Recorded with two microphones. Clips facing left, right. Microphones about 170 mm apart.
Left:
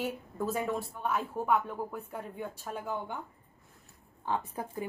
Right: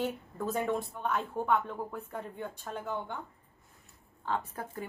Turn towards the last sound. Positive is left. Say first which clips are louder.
# left 1 dB
turn(degrees=15)  # may be behind; listen again after turning